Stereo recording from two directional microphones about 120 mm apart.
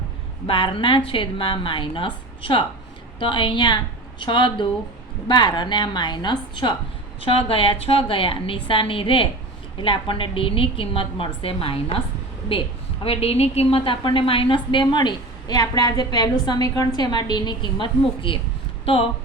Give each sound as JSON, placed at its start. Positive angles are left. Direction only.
{"t": 0.4, "sound": "a woman's voice", "side_deg": 50}
{"t": 7.2, "sound": "a woman's voice", "side_deg": 50}